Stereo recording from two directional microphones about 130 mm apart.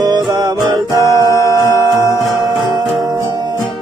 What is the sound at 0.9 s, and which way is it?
Music, 25° left (ahead or behind).